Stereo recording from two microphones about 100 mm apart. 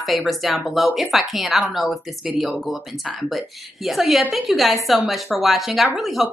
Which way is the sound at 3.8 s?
Centre (ahead or behind).